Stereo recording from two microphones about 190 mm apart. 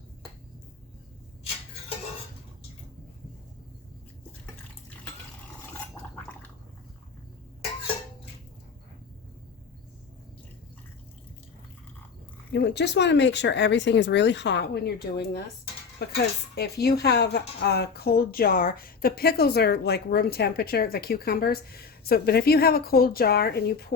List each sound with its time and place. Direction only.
12.5 s a woman's voice: 65° left (ahead or behind)